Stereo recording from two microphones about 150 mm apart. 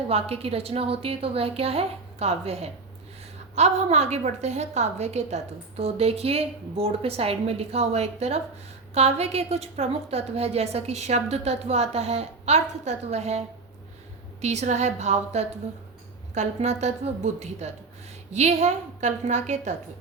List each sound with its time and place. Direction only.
0.1 s a woman's voice: 40° right (ahead or behind)
14.4 s a woman's voice: 50° right (ahead or behind)